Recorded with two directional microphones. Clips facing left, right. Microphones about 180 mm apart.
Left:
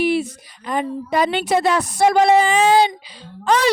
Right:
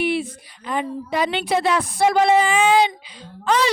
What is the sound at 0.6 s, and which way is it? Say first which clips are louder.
A woman's voice: left 2 dB; 45° left (ahead or behind).